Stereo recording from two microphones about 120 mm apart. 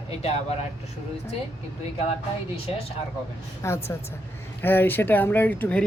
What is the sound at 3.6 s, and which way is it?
Speech, 25° left (ahead or behind).